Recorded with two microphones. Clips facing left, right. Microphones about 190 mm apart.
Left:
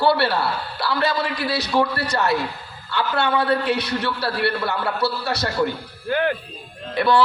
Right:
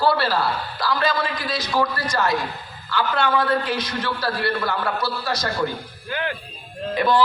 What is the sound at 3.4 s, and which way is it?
A man's voice, 65° left (ahead or behind).